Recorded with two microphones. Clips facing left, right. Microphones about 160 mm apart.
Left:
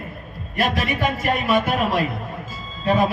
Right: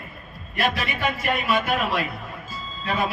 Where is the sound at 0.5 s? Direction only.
45° left (ahead or behind).